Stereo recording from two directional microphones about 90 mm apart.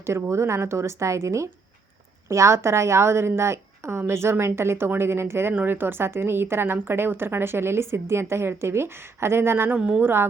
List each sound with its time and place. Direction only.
0.0 s a woman's voice: 30° right (ahead or behind)
9.7 s speech: 10° right (ahead or behind)
10.0 s a woman's voice: 25° right (ahead or behind)